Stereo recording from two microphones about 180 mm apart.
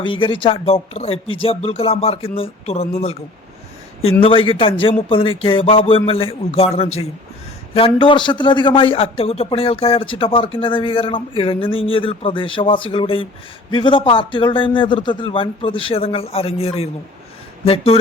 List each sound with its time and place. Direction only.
0.0 s speech: 30° left (ahead or behind)
4.2 s a man's voice: 30° left (ahead or behind)